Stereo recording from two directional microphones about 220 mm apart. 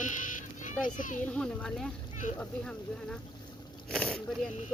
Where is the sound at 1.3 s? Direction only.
5° left (ahead or behind).